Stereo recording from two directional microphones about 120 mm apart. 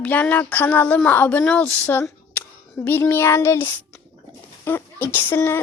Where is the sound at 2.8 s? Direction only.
15° left (ahead or behind).